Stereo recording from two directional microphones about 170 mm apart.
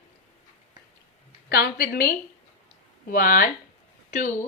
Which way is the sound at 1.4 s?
65° left (ahead or behind).